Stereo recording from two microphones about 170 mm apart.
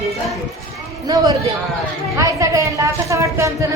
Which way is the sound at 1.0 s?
20° right (ahead or behind).